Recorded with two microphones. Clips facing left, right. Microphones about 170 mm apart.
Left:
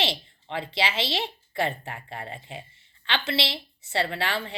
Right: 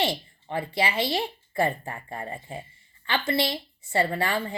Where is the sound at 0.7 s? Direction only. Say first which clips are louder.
Right 2 dB; 90° left.